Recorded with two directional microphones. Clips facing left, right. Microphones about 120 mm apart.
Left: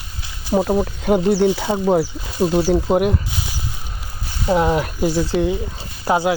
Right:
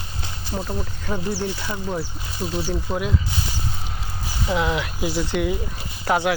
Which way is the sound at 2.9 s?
75° left (ahead or behind).